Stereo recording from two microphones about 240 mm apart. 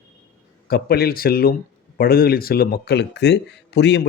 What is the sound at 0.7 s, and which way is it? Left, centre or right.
A man's voice, left.